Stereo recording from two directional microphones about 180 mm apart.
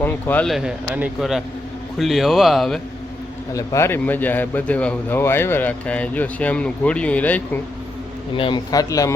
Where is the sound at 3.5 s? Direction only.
15° left (ahead or behind).